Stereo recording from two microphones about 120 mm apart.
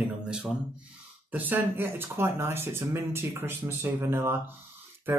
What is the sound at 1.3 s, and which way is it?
Speech, 15° right (ahead or behind).